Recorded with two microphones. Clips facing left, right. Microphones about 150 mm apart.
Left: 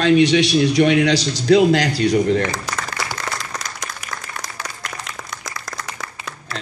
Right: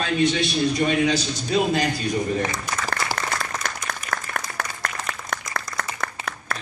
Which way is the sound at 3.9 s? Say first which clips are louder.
Right 3 dB; 55° right (ahead or behind).